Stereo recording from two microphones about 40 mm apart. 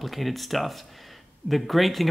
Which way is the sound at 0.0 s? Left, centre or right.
Centre.